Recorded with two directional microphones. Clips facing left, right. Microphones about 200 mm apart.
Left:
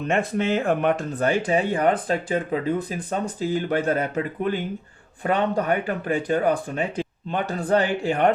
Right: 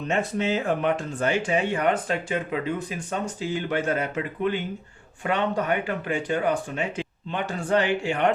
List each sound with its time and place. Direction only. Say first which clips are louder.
0.1 s speech: left 2 dB; 55° left (ahead or behind); by 8.2 s 35° left (ahead or behind)